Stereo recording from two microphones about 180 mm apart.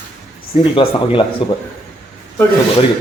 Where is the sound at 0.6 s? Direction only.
30° left (ahead or behind).